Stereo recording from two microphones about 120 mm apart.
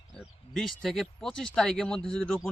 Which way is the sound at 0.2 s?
Centre (ahead or behind).